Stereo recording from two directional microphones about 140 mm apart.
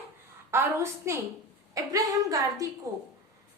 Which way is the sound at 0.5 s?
20° right (ahead or behind).